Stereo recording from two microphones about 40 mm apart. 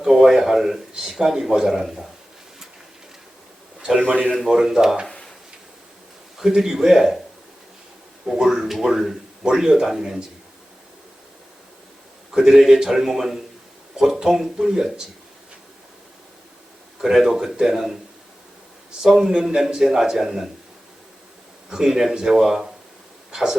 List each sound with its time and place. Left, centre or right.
0.0 s a man's voice: centre
3.8 s a man's voice: centre
5.0 s a sound: centre
6.4 s a man's voice: centre
8.2 s a man's voice: centre
12.3 s a man's voice: centre
17.0 s a man's voice: centre
19.0 s a man's voice: centre
21.7 s a man's voice: centre